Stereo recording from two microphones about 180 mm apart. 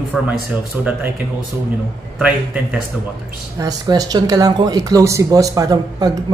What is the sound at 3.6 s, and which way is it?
Speech, 20° right (ahead or behind).